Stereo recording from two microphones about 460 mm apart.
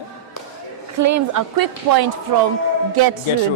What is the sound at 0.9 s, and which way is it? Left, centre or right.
A woman's voice, right.